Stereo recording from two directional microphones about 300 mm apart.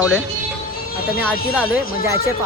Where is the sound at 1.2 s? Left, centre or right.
Centre.